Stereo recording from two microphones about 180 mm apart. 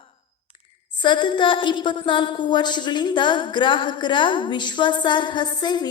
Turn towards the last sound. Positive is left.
turn(degrees=25)  # may be behind; listen again after turning